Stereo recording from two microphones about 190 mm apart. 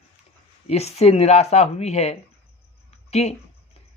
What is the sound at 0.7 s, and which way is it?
Speech, 35° left (ahead or behind).